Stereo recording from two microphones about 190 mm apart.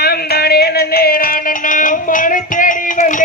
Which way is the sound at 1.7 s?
45° left (ahead or behind).